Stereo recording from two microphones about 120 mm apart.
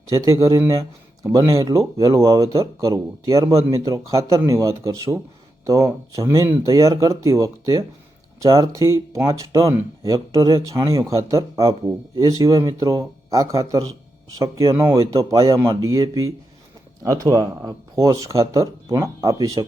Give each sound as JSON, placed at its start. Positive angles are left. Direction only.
{"t": 0.1, "sound": "speech", "side_deg": -25}